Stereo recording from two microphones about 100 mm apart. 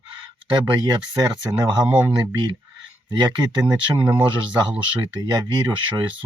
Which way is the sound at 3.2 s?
45° right (ahead or behind).